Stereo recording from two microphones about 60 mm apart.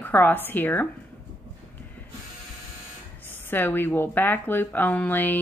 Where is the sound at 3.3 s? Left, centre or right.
Left.